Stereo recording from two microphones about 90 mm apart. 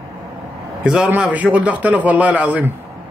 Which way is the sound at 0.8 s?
5° right (ahead or behind).